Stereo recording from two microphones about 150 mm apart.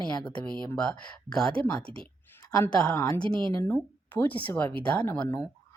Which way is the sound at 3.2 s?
35° right (ahead or behind).